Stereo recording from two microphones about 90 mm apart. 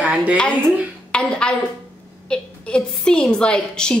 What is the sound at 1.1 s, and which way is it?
A woman's voice, 10° left (ahead or behind).